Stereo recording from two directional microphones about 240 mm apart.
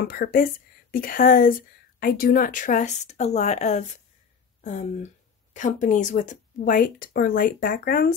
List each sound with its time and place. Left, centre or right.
0.0 s speech: left